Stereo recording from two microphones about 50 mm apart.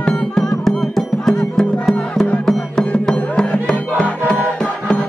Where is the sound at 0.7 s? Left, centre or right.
Centre.